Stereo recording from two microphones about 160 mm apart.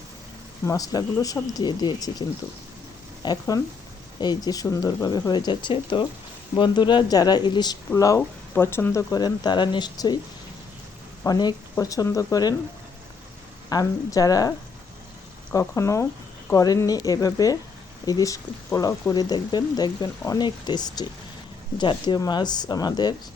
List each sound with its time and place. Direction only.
0.6 s speech: 20° left (ahead or behind)
3.2 s speech: 20° left (ahead or behind)
11.2 s speech: 25° left (ahead or behind)
13.7 s speech: 20° left (ahead or behind)
15.5 s speech: 20° left (ahead or behind)